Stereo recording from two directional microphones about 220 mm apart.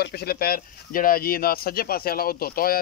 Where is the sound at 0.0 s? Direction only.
45° left (ahead or behind).